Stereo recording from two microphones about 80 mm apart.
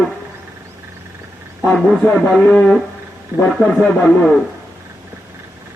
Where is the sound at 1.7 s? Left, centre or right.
Centre.